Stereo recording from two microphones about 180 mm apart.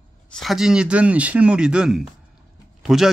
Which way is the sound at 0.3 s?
Centre (ahead or behind).